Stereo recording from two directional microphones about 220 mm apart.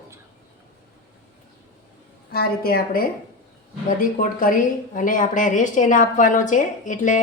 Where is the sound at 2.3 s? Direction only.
45° left (ahead or behind).